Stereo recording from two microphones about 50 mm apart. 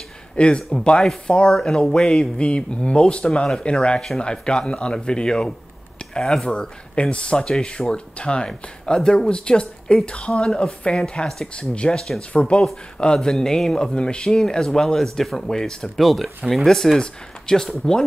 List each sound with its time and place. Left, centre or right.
0.4 s speech: centre
2.4 s speech: left